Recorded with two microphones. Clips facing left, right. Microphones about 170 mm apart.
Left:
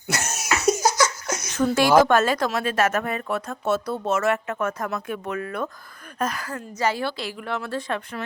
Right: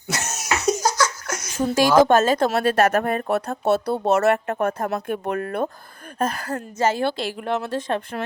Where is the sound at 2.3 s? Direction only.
25° right (ahead or behind).